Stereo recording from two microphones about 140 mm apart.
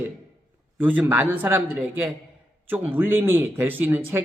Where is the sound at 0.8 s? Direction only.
15° right (ahead or behind).